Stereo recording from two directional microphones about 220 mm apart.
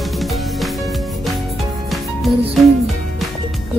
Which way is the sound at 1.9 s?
Centre (ahead or behind).